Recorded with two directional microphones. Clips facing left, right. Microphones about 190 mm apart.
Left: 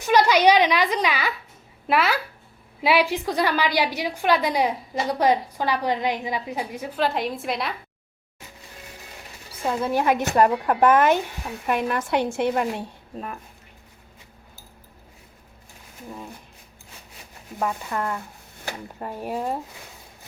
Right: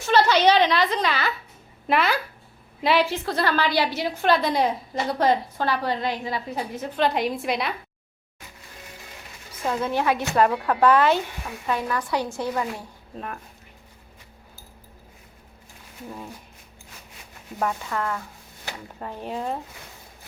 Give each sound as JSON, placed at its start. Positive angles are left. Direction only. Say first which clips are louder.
{"t": 0.0, "sound": "a woman's voice", "louder": "left 1 dB", "side_deg": 15}
{"t": 9.5, "sound": "a woman's voice", "louder": "left 1 dB", "side_deg": 10}
{"t": 13.1, "sound": "speech", "louder": "left 1 dB", "side_deg": 5}
{"t": 17.8, "sound": "a woman's voice", "louder": "even", "side_deg": 20}